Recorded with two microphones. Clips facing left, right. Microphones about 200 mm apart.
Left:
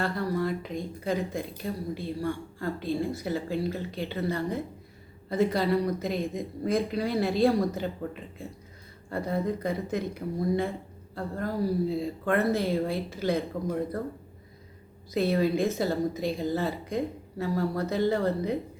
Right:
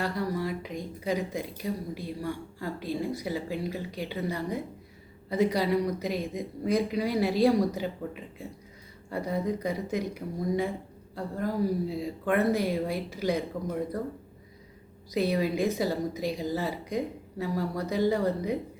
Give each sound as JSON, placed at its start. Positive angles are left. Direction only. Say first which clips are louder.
{"t": 0.0, "sound": "speech", "louder": "left 2 dB", "side_deg": -10}
{"t": 6.3, "sound": "speech", "louder": "even", "side_deg": 50}
{"t": 6.9, "sound": "speech", "louder": "even", "side_deg": -15}
{"t": 15.1, "sound": "speech", "louder": "left 2 dB", "side_deg": -15}